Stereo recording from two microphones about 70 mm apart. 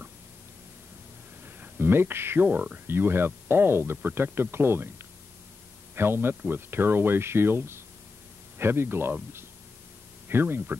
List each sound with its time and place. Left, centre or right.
1.4 s speech: right
2.4 s speech: right
2.9 s speech: right
5.9 s speech: right
10.2 s speech: right